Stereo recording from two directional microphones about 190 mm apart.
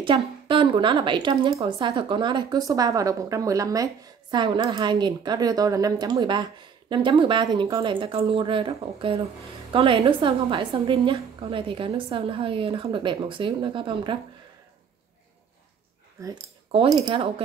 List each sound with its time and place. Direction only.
0.0 s a woman's voice: 25° right (ahead or behind)
16.2 s speech: 15° right (ahead or behind)
16.7 s a woman's voice: 30° right (ahead or behind)